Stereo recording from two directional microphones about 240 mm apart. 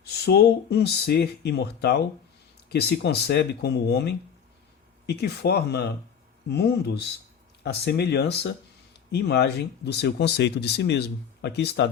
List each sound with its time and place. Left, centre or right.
0.0 s speech: left